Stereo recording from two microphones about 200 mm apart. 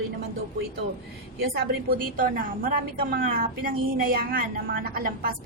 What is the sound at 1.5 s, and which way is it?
A woman's voice, 45° right (ahead or behind).